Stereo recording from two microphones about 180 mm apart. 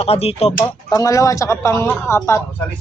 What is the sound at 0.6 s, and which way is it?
Speech, 20° left (ahead or behind).